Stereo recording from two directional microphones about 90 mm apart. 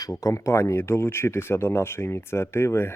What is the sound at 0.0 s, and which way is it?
Speech, 40° left (ahead or behind).